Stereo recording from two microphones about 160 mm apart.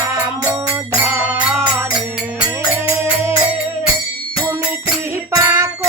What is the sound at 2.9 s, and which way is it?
Music, 15° right (ahead or behind).